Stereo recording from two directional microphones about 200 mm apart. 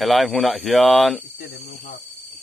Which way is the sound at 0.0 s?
Centre (ahead or behind).